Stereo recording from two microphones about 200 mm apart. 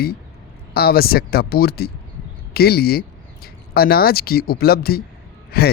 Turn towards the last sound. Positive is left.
turn(degrees=50)  # may be behind; listen again after turning